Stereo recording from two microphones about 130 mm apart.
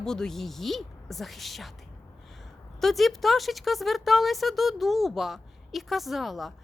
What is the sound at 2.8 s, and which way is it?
Speech, centre (ahead or behind).